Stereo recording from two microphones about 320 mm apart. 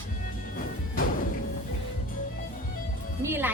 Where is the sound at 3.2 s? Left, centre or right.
Centre.